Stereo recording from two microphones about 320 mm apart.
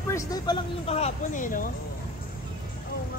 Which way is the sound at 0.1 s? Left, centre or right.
Centre.